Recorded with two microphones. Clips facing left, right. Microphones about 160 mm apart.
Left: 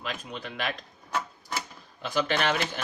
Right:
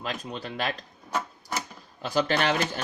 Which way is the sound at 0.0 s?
40° right (ahead or behind).